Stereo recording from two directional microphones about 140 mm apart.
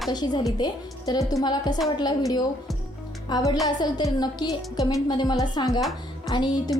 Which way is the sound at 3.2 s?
30° left (ahead or behind).